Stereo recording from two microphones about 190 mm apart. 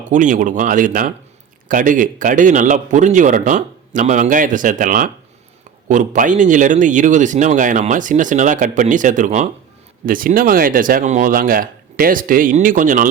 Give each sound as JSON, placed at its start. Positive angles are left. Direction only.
{"t": 0.1, "sound": "speech", "side_deg": -40}